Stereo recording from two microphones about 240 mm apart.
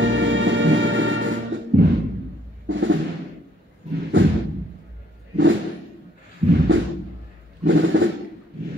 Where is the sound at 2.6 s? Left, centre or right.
Right.